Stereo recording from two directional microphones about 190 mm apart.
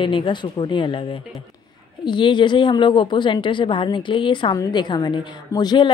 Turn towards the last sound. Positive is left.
turn(degrees=20)  # may be behind; listen again after turning